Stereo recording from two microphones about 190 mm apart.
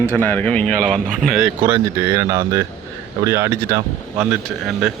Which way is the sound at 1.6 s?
15° right (ahead or behind).